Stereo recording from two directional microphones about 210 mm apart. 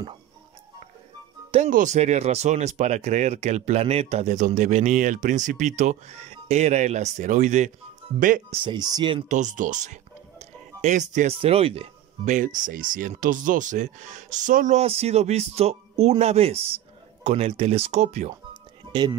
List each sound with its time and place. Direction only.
1.5 s speech: 35° right (ahead or behind)
8.6 s speech: 20° right (ahead or behind)
9.3 s speech: 35° right (ahead or behind)
18.9 s speech: 20° right (ahead or behind)